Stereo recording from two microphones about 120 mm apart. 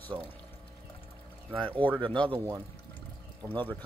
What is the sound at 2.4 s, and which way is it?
Speech, 20° right (ahead or behind).